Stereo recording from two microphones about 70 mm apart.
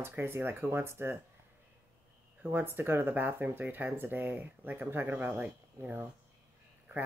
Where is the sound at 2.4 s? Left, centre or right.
Right.